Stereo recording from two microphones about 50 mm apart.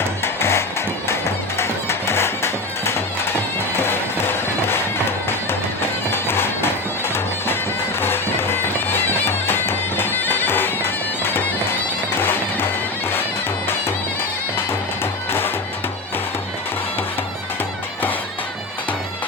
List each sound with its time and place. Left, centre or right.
0.2 s music: left
6.2 s music: left
9.0 s bagpipes: left